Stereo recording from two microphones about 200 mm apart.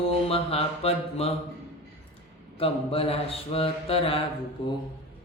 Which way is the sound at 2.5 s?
30° left (ahead or behind).